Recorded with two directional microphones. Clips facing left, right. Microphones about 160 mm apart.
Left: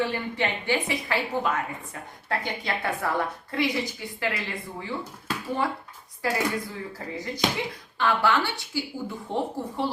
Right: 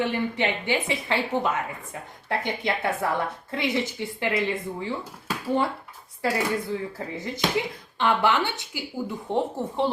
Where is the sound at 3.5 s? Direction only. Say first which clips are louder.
Right 1 dB; 25° right (ahead or behind).